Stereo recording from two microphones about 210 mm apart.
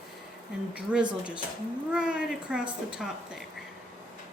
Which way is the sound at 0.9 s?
5° right (ahead or behind).